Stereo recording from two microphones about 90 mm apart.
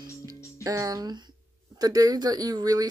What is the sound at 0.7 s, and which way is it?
Speech, 40° right (ahead or behind).